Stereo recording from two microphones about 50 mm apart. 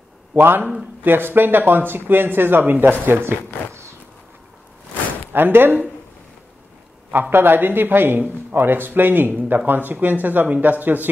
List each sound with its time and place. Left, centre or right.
0.4 s speech: right
5.3 s speech: right
7.1 s speech: right